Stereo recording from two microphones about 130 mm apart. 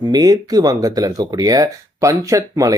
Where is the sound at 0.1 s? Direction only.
30° right (ahead or behind).